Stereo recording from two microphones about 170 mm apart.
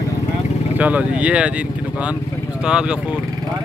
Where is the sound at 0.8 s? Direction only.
10° right (ahead or behind).